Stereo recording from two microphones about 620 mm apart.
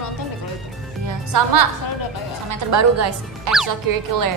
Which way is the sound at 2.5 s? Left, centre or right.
Right.